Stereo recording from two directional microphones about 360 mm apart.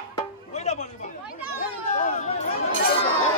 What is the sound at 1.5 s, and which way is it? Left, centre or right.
Chatter, left.